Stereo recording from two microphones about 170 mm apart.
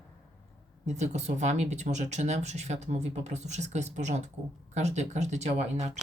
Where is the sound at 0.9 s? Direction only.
40° right (ahead or behind).